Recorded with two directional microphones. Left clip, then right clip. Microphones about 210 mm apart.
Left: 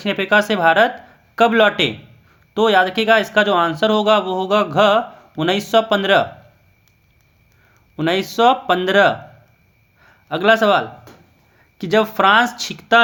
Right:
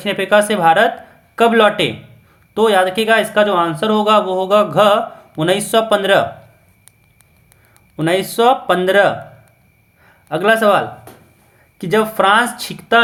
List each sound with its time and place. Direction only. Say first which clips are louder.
0.0 s speech: right 3 dB; 15° left (ahead or behind)
7.9 s a man's voice: right 2 dB; 15° left (ahead or behind)